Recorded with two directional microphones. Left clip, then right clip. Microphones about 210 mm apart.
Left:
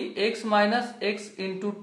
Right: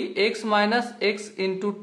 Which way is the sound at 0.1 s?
40° right (ahead or behind).